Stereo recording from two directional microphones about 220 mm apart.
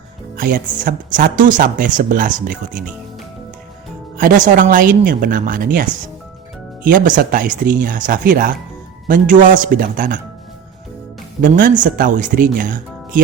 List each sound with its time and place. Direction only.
0.3 s speech: 40° right (ahead or behind)
4.2 s speech: 35° right (ahead or behind)
11.4 s speech: 40° right (ahead or behind)